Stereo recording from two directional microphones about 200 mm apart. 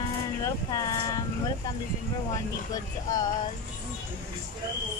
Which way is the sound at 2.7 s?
20° left (ahead or behind).